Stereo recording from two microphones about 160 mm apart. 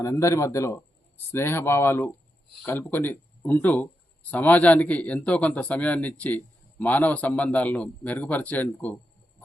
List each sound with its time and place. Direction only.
0.0 s speech: 20° left (ahead or behind)